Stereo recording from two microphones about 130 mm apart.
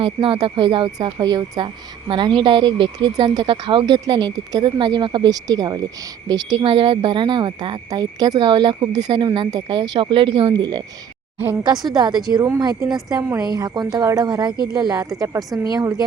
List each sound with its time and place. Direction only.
0.0 s speech: 40° right (ahead or behind)
10.5 s speech: 30° right (ahead or behind)